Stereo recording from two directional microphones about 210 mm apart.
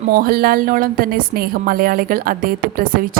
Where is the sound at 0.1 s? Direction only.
45° right (ahead or behind).